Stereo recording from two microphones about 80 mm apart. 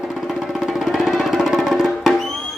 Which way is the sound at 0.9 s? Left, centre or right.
Centre.